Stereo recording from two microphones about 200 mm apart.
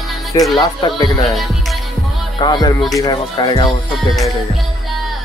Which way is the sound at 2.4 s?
20° left (ahead or behind).